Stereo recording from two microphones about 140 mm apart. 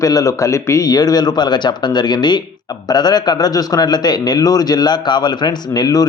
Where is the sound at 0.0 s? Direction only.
25° left (ahead or behind).